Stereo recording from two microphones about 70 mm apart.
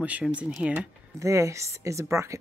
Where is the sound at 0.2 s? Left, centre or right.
Centre.